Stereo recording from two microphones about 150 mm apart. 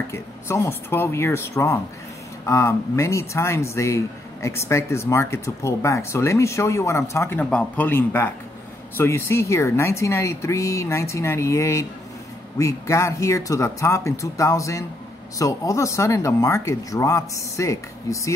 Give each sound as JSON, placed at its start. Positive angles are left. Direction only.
{"t": 0.1, "sound": "speech", "side_deg": 15}